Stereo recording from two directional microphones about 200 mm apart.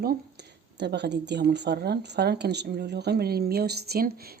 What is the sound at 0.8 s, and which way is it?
Speech, 55° right (ahead or behind).